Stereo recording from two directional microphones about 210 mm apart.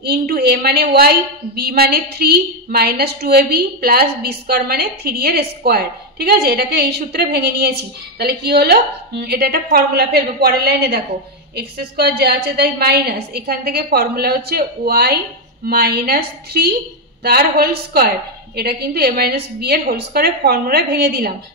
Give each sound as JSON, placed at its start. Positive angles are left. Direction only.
{"t": 0.0, "sound": "a woman's voice", "side_deg": -50}